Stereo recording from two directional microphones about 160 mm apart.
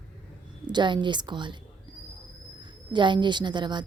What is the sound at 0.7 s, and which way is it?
Speech, 30° right (ahead or behind).